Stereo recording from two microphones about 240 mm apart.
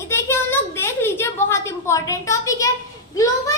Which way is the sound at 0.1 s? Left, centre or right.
Centre.